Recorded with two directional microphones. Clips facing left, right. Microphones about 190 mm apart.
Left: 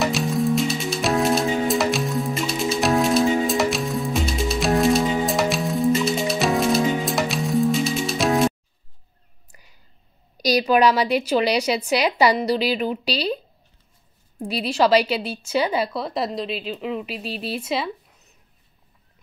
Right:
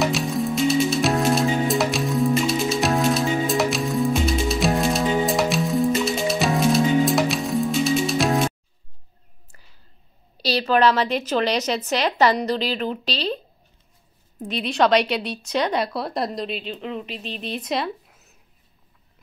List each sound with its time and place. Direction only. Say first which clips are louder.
0.0 s music: left 1 dB; centre (ahead or behind)
10.3 s a woman's voice: left 2 dB; 15° left (ahead or behind)
14.7 s speech: left 1 dB; 5° left (ahead or behind)